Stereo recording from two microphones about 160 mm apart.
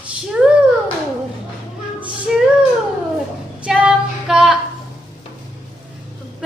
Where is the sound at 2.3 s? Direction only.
Centre (ahead or behind).